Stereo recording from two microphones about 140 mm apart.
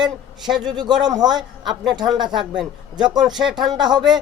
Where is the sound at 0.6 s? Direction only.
30° right (ahead or behind).